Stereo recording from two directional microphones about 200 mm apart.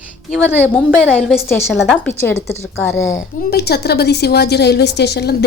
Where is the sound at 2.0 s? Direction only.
10° left (ahead or behind).